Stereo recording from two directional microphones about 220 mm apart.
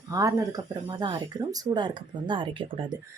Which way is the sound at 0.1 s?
15° right (ahead or behind).